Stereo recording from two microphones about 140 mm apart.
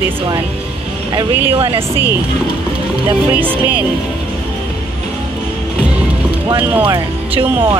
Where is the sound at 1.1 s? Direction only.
40° right (ahead or behind).